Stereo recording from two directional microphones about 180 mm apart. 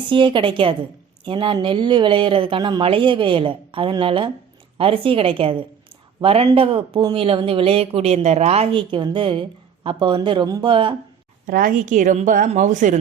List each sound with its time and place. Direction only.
0.1 s a woman's voice: 30° right (ahead or behind)
11.4 s a woman's voice: 50° right (ahead or behind)